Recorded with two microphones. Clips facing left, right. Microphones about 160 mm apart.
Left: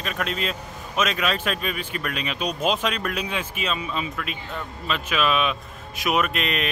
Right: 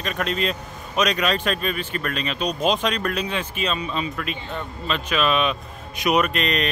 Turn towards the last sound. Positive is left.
turn(degrees=5)  # may be behind; listen again after turning